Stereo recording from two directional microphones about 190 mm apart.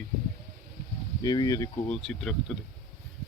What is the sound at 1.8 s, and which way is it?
Speech, 5° left (ahead or behind).